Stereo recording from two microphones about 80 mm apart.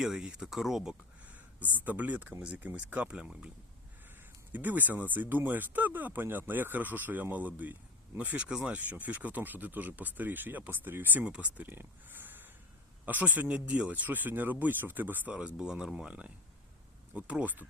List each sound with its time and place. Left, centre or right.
0.0 s speech: centre
1.8 s speech: right
4.5 s speech: right